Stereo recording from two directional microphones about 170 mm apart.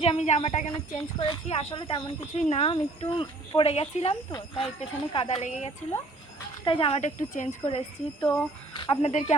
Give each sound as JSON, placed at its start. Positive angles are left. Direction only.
{"t": 0.0, "sound": "a woman's voice", "side_deg": 40}
{"t": 1.2, "sound": "speech", "side_deg": 30}
{"t": 2.3, "sound": "speech", "side_deg": 40}
{"t": 6.7, "sound": "speech", "side_deg": 30}
{"t": 7.0, "sound": "a woman's voice", "side_deg": 45}
{"t": 7.6, "sound": "speech", "side_deg": 30}